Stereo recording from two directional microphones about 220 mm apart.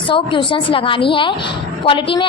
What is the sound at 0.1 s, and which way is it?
A woman's voice, 25° left (ahead or behind).